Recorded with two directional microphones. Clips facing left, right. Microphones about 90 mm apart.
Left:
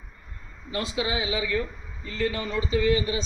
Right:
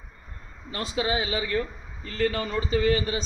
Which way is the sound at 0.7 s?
40° right (ahead or behind).